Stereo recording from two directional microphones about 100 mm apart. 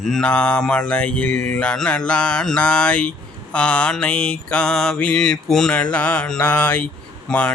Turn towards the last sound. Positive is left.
turn(degrees=10)  # may be behind; listen again after turning